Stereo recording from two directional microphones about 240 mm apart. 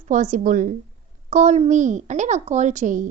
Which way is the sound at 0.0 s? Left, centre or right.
Right.